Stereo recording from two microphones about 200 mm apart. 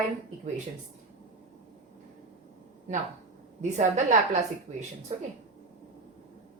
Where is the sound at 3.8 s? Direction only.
35° right (ahead or behind).